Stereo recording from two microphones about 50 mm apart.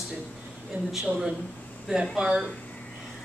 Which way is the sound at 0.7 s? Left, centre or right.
Right.